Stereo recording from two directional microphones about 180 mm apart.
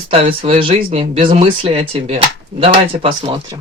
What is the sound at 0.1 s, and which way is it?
Speech, 30° right (ahead or behind).